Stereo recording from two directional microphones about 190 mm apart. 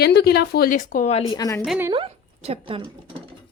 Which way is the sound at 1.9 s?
30° right (ahead or behind).